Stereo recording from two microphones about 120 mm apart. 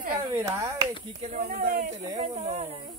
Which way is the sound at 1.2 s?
90° right.